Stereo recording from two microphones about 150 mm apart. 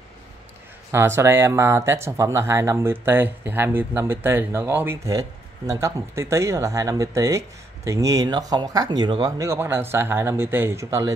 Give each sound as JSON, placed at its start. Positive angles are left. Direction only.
{"t": 0.9, "sound": "speech", "side_deg": -15}